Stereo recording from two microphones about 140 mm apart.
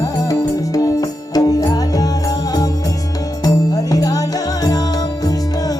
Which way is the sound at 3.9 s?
25° left (ahead or behind).